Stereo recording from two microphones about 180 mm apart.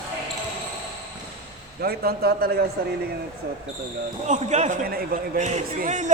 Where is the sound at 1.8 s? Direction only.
60° right (ahead or behind).